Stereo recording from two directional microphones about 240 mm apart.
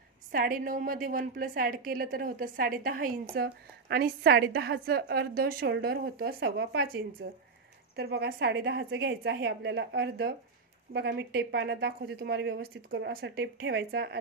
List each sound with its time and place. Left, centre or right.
0.3 s a woman's voice: right